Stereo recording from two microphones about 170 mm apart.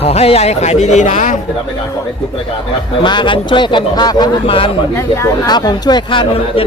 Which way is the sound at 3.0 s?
30° left (ahead or behind).